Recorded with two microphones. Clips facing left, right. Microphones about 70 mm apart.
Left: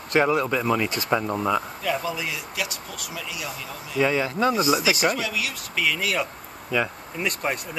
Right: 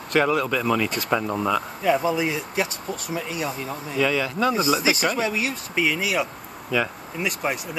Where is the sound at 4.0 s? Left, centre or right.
Left.